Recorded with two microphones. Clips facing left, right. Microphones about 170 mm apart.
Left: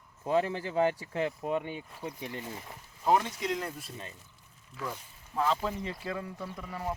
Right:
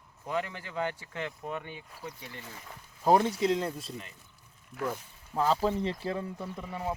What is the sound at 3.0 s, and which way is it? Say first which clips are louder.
Speech: right 3 dB; 35° right (ahead or behind).